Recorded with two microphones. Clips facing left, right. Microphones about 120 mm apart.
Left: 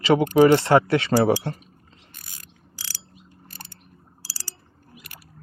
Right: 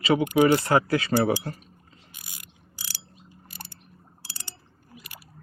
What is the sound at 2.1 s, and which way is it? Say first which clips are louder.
Pulleys: even; 10° right (ahead or behind).